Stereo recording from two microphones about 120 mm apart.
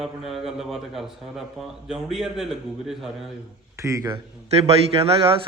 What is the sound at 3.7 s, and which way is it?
Speech, 25° right (ahead or behind).